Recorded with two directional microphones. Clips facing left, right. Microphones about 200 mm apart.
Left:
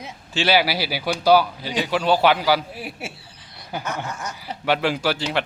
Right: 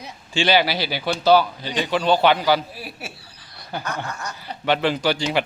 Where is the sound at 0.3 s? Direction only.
5° left (ahead or behind).